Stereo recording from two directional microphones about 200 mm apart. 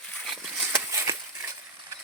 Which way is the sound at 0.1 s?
Centre (ahead or behind).